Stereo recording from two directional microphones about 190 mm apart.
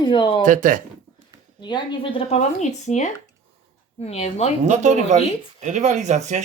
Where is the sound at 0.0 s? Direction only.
25° left (ahead or behind).